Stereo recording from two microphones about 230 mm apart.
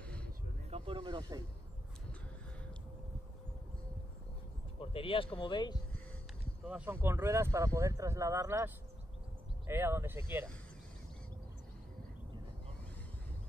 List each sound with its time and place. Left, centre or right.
0.0 s a sound: centre
0.7 s snake: right
4.7 s speech: left
6.6 s speech: centre